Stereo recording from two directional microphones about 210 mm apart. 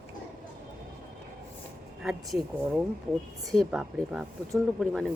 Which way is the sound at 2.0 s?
Centre (ahead or behind).